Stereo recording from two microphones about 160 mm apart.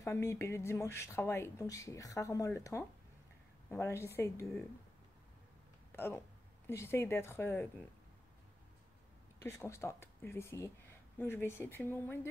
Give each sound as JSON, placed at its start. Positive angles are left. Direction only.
{"t": 0.0, "sound": "speech", "side_deg": 20}
{"t": 5.9, "sound": "speech", "side_deg": 15}
{"t": 9.4, "sound": "speech", "side_deg": 15}